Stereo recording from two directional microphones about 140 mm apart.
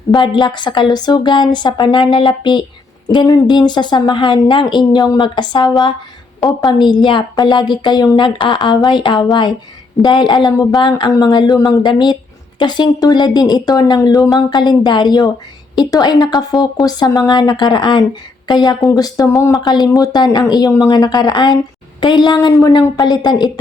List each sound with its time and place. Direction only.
0.1 s speech: 30° left (ahead or behind)